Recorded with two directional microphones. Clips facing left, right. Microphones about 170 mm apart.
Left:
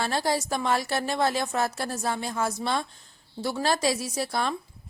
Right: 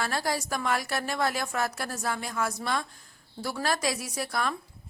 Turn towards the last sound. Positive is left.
turn(degrees=30)  # may be behind; listen again after turning